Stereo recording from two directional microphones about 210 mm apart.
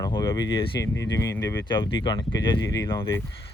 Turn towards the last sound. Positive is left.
turn(degrees=15)  # may be behind; listen again after turning